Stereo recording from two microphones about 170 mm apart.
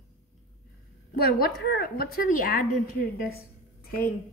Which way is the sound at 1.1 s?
65° left (ahead or behind).